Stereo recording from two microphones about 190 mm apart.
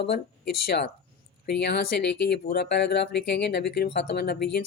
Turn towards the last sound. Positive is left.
turn(degrees=55)  # may be behind; listen again after turning